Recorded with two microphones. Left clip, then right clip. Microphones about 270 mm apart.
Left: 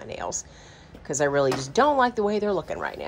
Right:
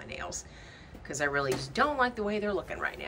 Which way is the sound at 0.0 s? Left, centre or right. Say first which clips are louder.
Left 7 dB; centre.